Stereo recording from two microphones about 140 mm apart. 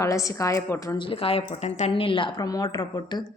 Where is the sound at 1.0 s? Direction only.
40° left (ahead or behind).